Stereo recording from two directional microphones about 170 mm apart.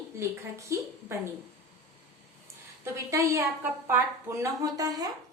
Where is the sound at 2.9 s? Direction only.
15° right (ahead or behind).